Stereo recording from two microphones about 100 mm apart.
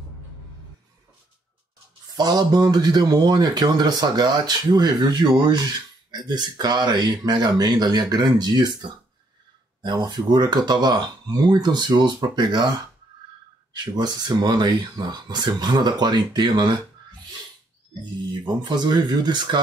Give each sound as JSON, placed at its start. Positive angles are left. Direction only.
{"t": 2.1, "sound": "speech", "side_deg": -45}
{"t": 13.9, "sound": "speech", "side_deg": -45}
{"t": 18.6, "sound": "speech", "side_deg": -45}